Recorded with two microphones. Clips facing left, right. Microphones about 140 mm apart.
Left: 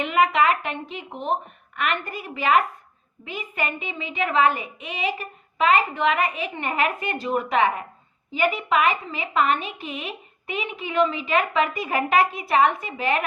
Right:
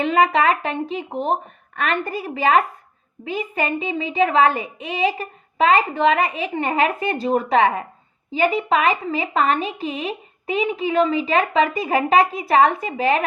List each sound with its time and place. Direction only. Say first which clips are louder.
0.0 s a woman's voice: right 3 dB; 35° right (ahead or behind)